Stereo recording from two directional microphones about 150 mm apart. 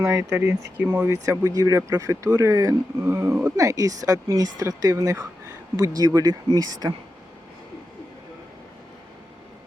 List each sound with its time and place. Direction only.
0.0 s speech: 20° right (ahead or behind)